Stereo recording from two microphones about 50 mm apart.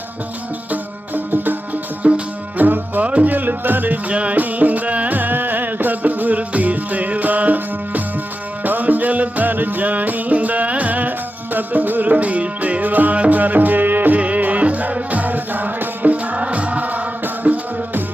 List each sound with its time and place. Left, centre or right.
0.7 s music: right
2.0 s music: right
2.6 s music: right
4.1 s music: right